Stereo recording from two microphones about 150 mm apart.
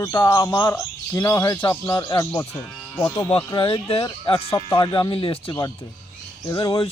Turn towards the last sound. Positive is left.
turn(degrees=20)  # may be behind; listen again after turning